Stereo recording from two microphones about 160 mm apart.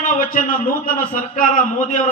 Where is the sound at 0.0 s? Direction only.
60° left (ahead or behind).